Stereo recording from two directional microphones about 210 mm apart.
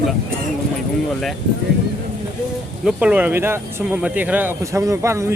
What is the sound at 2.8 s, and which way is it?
Speech, 5° right (ahead or behind).